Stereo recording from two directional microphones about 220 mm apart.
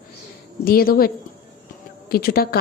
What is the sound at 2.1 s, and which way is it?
Speech, 40° left (ahead or behind).